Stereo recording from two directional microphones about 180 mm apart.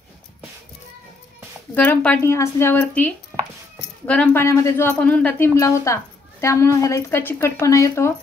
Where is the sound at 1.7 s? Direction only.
10° left (ahead or behind).